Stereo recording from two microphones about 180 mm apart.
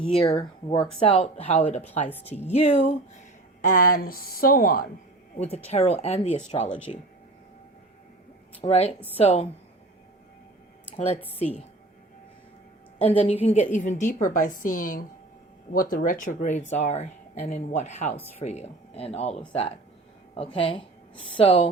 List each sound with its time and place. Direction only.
0.2 s speech: 30° left (ahead or behind)
3.7 s a woman's voice: 50° left (ahead or behind)
5.6 s speech: 35° left (ahead or behind)
8.6 s speech: 35° left (ahead or behind)
10.9 s speech: 35° left (ahead or behind)
13.0 s a woman's voice: 30° left (ahead or behind)